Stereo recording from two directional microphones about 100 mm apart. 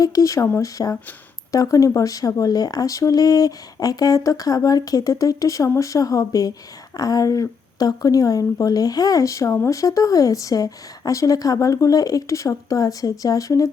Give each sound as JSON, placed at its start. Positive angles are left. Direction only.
{"t": 0.0, "sound": "speech", "side_deg": 35}